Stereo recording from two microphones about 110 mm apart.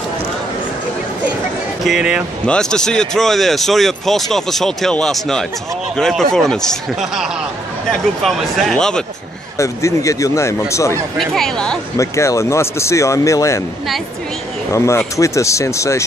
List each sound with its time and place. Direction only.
1.9 s speech: 5° right (ahead or behind)
2.4 s speech: 5° left (ahead or behind)
9.6 s a man's voice: 30° left (ahead or behind)
11.1 s speech: 5° left (ahead or behind)
12.0 s a man's voice: 25° left (ahead or behind)
14.7 s a man's voice: 25° left (ahead or behind)